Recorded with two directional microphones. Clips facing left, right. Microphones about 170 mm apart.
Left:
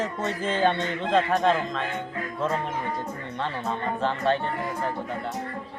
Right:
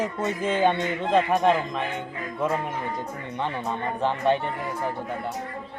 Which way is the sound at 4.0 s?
15° right (ahead or behind).